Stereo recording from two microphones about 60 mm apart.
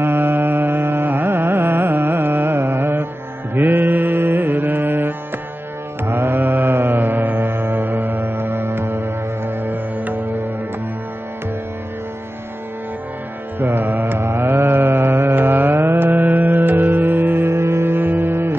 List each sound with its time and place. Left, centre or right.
0.0 s carnatic music: right
3.5 s music: right
13.6 s mantra: right
16.3 s music: right
17.9 s music: right